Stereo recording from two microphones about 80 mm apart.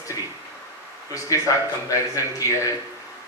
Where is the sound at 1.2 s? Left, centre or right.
Left.